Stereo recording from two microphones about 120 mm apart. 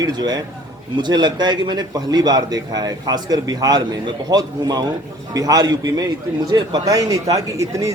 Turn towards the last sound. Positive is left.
turn(degrees=-25)  # may be behind; listen again after turning